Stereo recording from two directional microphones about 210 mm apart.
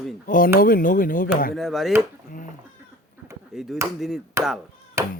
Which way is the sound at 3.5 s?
Centre (ahead or behind).